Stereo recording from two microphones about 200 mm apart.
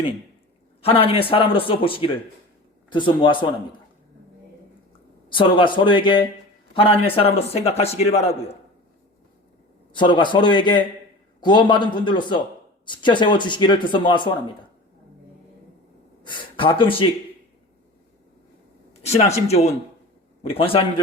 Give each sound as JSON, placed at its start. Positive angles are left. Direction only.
{"t": 0.8, "sound": "a man's voice", "side_deg": 30}
{"t": 5.3, "sound": "a man's voice", "side_deg": 25}
{"t": 9.9, "sound": "a man's voice", "side_deg": 25}
{"t": 16.2, "sound": "speech", "side_deg": 25}
{"t": 19.0, "sound": "a man's voice", "side_deg": 30}